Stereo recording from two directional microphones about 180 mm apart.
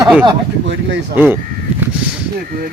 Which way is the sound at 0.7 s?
75° right (ahead or behind).